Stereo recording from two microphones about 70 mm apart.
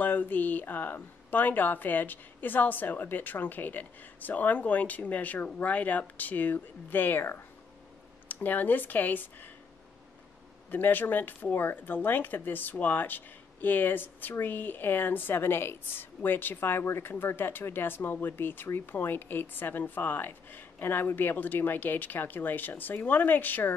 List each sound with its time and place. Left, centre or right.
0.0 s speech: left
10.7 s speech: left